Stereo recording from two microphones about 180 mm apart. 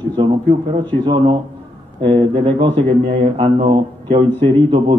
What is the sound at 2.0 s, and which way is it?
Speech, 30° right (ahead or behind).